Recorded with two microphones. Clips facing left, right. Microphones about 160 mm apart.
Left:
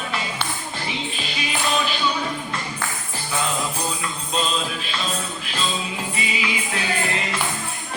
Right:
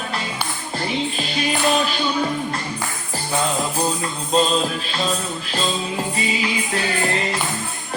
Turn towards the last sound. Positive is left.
turn(degrees=-35)  # may be behind; listen again after turning